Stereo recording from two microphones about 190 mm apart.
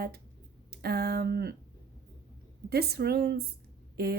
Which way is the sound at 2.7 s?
55° right (ahead or behind).